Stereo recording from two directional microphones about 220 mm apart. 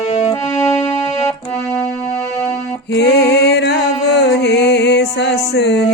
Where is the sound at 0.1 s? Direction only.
15° left (ahead or behind).